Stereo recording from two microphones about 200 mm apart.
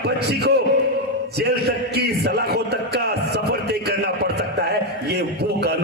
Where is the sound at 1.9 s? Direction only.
55° right (ahead or behind).